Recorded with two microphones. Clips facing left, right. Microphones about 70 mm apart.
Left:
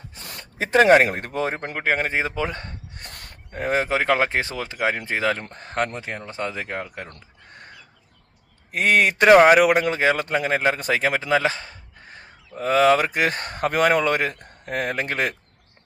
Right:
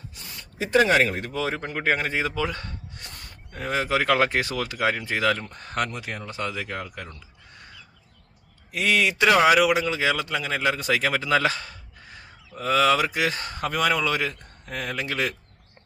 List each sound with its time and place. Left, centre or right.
0.2 s gasp: left
0.8 s speech: left
2.0 s speech: left
3.5 s speech: left
8.7 s speech: left